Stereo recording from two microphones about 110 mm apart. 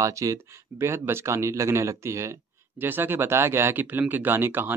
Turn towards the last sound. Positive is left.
turn(degrees=-20)  # may be behind; listen again after turning